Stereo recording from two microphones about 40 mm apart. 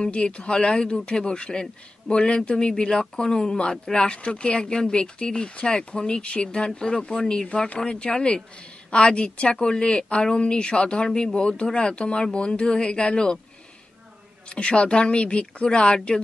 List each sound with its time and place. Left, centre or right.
0.0 s speech: left
14.5 s speech: left